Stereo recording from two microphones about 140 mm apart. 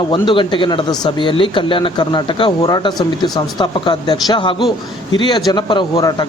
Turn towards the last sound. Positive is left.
turn(degrees=30)  # may be behind; listen again after turning